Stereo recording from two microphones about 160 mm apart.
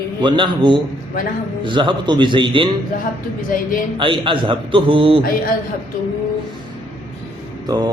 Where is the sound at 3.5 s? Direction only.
60° left (ahead or behind).